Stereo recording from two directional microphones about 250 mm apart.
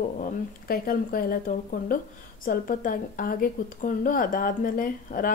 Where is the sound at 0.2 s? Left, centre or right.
Left.